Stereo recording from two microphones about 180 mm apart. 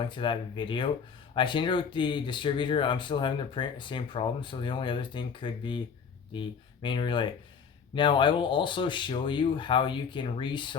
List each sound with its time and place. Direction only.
0.0 s speech: 25° left (ahead or behind)